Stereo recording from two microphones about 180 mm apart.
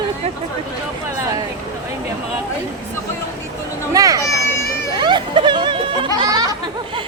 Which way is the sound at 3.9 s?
20° right (ahead or behind).